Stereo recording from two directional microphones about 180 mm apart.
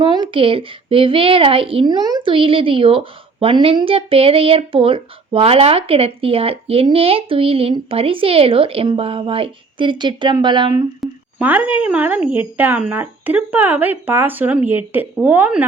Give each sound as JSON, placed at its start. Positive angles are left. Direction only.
{"t": 0.0, "sound": "speech", "side_deg": -25}
{"t": 11.0, "sound": "speech", "side_deg": -10}